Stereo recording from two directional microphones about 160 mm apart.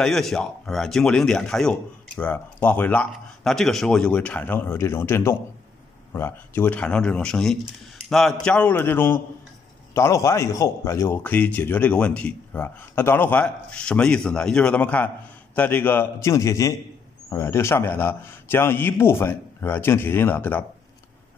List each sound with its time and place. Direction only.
0.0 s a man's voice: centre (ahead or behind)